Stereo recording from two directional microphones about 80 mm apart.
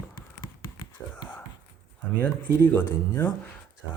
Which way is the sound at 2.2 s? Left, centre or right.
Left.